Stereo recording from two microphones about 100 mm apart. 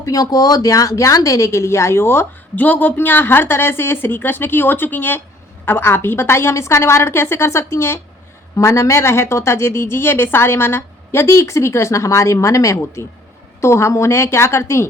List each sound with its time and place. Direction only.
0.0 s speech: 35° left (ahead or behind)